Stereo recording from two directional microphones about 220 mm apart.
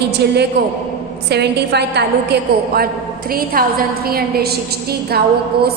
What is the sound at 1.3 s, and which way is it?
Speech, 50° right (ahead or behind).